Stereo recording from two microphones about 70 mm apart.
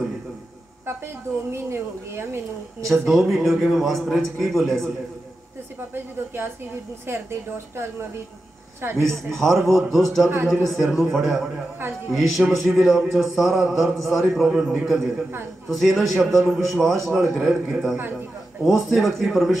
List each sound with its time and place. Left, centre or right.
1.5 s speech: right
2.8 s speech: centre
5.9 s speech: right
9.0 s speech: centre